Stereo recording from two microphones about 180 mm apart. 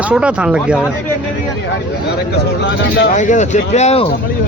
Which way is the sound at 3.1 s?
45° left (ahead or behind).